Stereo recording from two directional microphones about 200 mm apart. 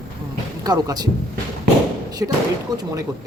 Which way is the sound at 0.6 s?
20° right (ahead or behind).